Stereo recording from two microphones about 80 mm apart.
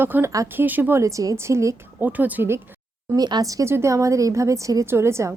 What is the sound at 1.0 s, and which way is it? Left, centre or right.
Speech, right.